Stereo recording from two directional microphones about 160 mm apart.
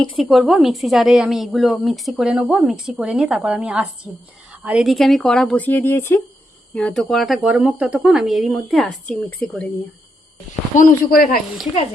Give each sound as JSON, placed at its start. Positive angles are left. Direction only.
{"t": 0.0, "sound": "a woman's voice", "side_deg": 0}
{"t": 6.7, "sound": "a woman's voice", "side_deg": 5}
{"t": 10.8, "sound": "speech", "side_deg": 60}